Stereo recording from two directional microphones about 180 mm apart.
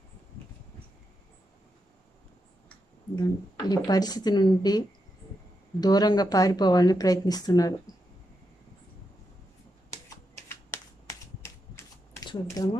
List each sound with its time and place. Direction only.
3.2 s a woman's voice: 20° left (ahead or behind)
10.0 s shuffling cards: 15° left (ahead or behind)
12.3 s speech: 20° left (ahead or behind)